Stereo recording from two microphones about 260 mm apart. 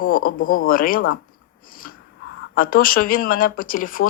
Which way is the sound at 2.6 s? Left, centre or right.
Left.